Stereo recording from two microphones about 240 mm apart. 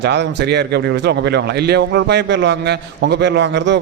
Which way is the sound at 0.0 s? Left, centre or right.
Right.